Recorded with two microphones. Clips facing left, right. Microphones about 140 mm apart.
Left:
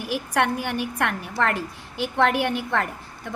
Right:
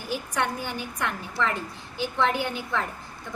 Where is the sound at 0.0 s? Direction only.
70° left (ahead or behind).